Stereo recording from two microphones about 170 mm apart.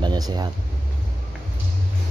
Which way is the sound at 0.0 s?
25° right (ahead or behind).